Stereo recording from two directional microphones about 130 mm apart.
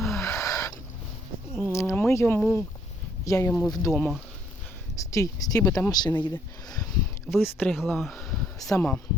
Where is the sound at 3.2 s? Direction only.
25° left (ahead or behind).